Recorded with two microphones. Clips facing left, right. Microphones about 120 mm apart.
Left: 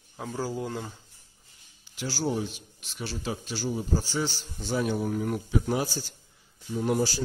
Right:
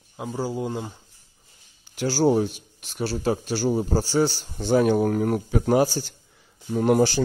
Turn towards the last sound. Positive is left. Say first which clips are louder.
# right 7 dB
turn(degrees=-65)  # may be behind; listen again after turning